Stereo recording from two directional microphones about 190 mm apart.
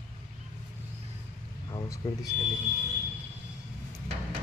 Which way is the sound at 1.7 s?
20° left (ahead or behind).